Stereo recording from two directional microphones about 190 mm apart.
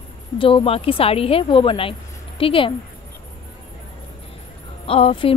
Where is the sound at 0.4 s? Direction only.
25° left (ahead or behind).